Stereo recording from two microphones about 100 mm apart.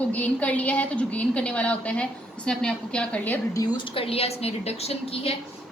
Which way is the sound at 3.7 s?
60° left (ahead or behind).